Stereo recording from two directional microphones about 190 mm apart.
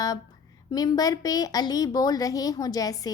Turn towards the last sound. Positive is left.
turn(degrees=20)  # may be behind; listen again after turning